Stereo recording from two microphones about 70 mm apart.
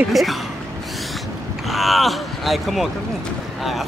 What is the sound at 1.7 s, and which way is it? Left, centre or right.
Speech, centre.